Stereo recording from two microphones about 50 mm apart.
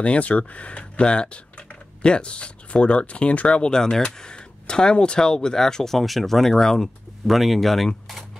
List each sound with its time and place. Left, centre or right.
0.0 s speech: left; by 6.9 s centre
7.2 s speech: centre